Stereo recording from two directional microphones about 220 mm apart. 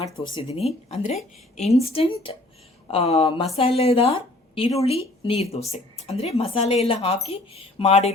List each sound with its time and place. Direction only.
0.0 s a woman's voice: 25° left (ahead or behind)